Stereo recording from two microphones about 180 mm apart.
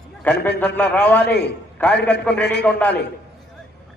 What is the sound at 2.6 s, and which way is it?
Speech, 10° left (ahead or behind).